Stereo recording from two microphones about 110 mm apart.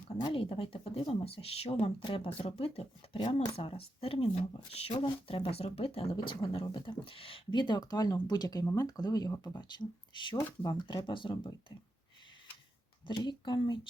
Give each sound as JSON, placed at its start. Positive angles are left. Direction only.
{"t": 0.3, "sound": "speech", "side_deg": 50}
{"t": 10.6, "sound": "speech", "side_deg": 45}
{"t": 13.1, "sound": "speech", "side_deg": 45}